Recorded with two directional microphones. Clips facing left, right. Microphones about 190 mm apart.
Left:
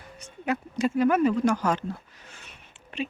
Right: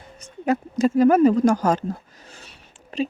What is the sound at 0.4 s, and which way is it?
Speech, 40° right (ahead or behind).